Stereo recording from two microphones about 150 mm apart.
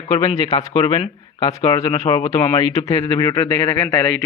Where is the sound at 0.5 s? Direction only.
35° left (ahead or behind).